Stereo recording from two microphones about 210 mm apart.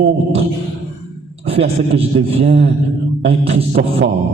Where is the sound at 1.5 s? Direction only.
30° right (ahead or behind).